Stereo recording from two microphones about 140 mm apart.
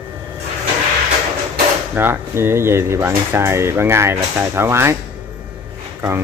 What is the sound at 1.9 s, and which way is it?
Speech, 15° right (ahead or behind).